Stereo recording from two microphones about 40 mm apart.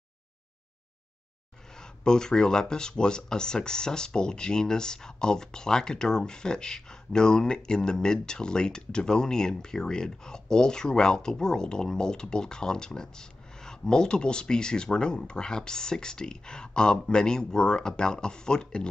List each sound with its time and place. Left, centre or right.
1.8 s speech: centre